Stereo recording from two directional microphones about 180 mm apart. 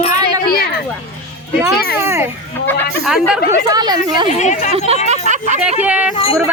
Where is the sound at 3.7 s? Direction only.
20° right (ahead or behind).